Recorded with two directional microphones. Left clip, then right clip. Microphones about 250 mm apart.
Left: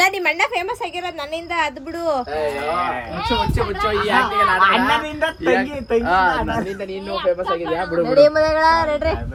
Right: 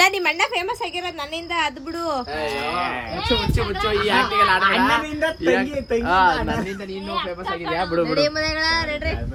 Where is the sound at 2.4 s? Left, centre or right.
Right.